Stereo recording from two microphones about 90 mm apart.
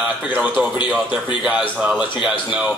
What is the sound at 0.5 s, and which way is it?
A man's voice, 10° right (ahead or behind).